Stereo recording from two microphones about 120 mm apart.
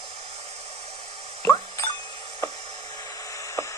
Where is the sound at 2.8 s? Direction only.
35° left (ahead or behind).